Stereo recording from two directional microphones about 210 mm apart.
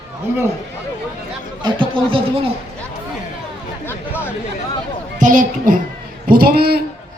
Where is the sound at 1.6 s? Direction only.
25° right (ahead or behind).